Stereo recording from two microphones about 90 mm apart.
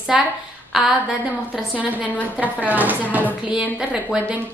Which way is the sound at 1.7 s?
15° right (ahead or behind).